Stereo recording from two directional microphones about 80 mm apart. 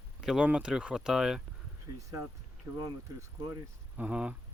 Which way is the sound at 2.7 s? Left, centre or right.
Right.